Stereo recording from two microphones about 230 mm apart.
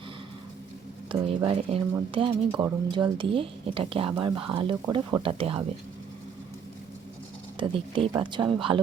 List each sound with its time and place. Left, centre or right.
1.1 s speech: right
7.5 s speech: right